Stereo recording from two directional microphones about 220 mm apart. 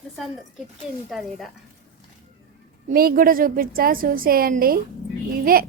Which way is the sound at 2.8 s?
40° right (ahead or behind).